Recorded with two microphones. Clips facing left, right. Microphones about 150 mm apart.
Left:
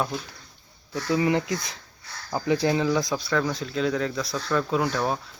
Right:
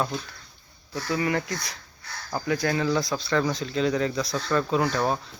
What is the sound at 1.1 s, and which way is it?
Speech, 20° left (ahead or behind).